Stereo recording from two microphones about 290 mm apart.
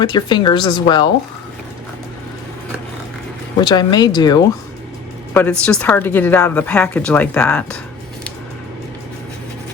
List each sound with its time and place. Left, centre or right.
0.0 s speech: centre
3.6 s a woman's voice: centre